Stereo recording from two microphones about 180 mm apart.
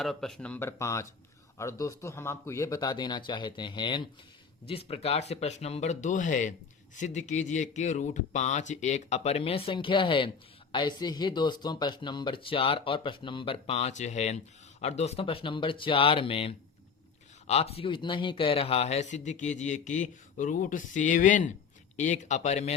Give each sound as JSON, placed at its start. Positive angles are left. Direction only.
{"t": 0.0, "sound": "speech", "side_deg": 0}